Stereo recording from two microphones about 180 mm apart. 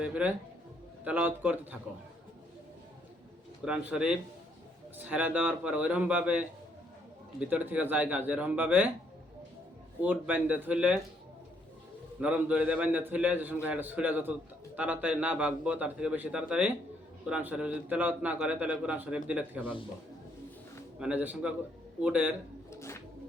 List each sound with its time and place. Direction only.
0.0 s a man's voice: 10° right (ahead or behind)
3.6 s a man's voice: 5° right (ahead or behind)
10.0 s a man's voice: 10° right (ahead or behind)
12.2 s a man's voice: 5° right (ahead or behind)
21.0 s a man's voice: 10° right (ahead or behind)
22.7 s a sound: 15° left (ahead or behind)